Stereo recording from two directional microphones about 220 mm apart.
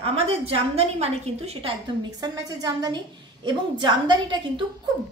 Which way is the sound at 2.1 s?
20° right (ahead or behind).